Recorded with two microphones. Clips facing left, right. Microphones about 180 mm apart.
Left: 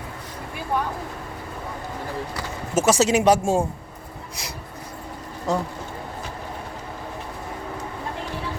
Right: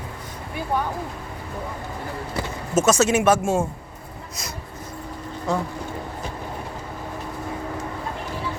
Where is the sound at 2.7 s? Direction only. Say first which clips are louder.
Even; 10° left (ahead or behind).